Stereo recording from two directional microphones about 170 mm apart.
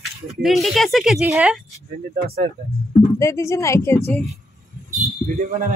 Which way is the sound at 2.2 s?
65° right (ahead or behind).